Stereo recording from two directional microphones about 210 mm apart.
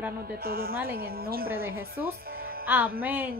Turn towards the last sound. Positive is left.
turn(degrees=-10)  # may be behind; listen again after turning